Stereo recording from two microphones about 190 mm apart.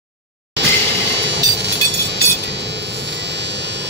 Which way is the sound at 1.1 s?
65° right (ahead or behind).